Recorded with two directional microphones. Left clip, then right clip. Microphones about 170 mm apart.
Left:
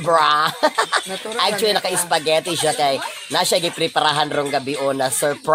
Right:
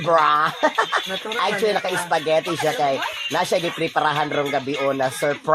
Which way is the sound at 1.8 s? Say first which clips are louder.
Left 2 dB; 25° left (ahead or behind).